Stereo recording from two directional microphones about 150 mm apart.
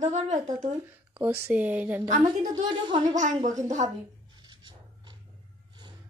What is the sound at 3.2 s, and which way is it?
Speech, 55° right (ahead or behind).